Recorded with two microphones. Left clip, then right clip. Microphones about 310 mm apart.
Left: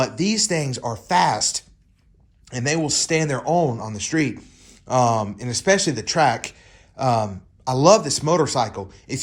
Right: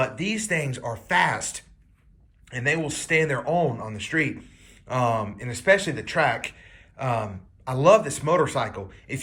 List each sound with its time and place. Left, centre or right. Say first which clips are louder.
0.0 s speech: left 5 dB; centre